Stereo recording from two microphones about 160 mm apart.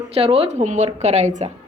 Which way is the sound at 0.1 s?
40° right (ahead or behind).